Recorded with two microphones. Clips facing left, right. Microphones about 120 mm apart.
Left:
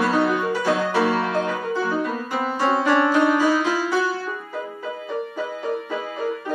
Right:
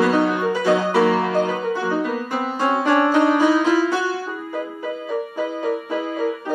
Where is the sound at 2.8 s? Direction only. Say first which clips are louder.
Right 3 dB; 20° right (ahead or behind).